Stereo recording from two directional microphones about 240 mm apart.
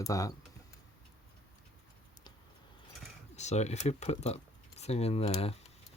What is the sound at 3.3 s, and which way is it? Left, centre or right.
Speech, left.